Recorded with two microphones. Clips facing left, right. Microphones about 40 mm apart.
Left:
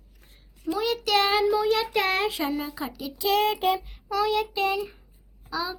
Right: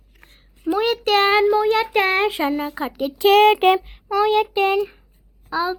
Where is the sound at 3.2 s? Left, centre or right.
Right.